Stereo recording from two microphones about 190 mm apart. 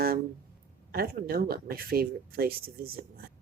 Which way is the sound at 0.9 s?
50° right (ahead or behind).